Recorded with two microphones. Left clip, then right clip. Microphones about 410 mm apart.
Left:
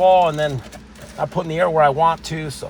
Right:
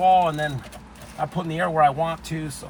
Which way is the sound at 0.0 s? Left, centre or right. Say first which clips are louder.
Left 4 dB; centre.